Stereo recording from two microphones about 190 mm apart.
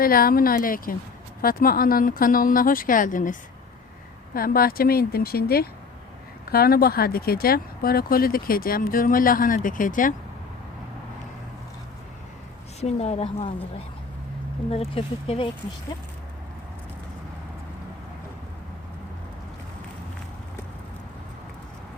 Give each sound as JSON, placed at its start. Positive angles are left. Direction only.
{"t": 0.0, "sound": "speech", "side_deg": 50}
{"t": 4.4, "sound": "speech", "side_deg": 50}
{"t": 12.8, "sound": "a woman's voice", "side_deg": 35}